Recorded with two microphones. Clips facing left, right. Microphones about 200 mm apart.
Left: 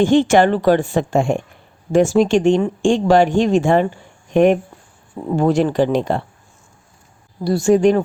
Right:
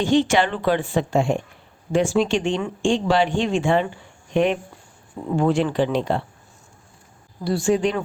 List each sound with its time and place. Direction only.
0.0 s speech: 50° left (ahead or behind)
5.3 s speech: 40° left (ahead or behind)
7.4 s speech: 40° left (ahead or behind)